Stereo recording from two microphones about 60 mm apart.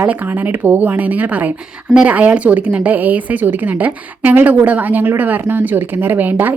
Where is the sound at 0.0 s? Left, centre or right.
Right.